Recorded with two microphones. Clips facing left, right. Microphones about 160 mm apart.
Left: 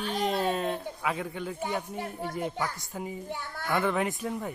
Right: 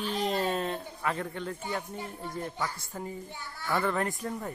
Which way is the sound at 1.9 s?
65° left (ahead or behind).